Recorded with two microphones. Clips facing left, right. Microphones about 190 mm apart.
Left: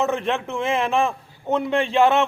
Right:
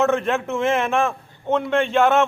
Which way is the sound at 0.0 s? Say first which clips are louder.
Right 3 dB; centre (ahead or behind).